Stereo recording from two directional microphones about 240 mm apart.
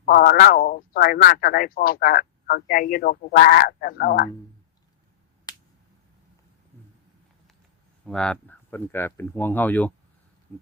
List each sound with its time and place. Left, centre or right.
0.0 s speech: left
8.0 s speech: centre